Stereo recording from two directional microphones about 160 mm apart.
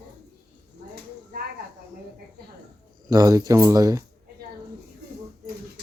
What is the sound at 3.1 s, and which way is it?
Speech, 25° right (ahead or behind).